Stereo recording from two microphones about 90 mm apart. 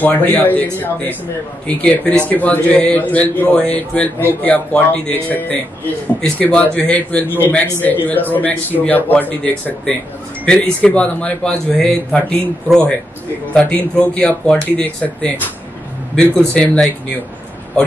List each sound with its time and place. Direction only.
0.0 s a man's voice: 20° left (ahead or behind)